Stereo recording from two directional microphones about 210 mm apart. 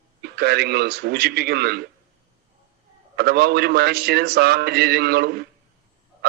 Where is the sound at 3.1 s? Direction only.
50° right (ahead or behind).